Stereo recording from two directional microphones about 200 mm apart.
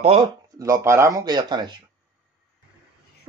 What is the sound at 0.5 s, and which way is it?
Speech, 15° right (ahead or behind).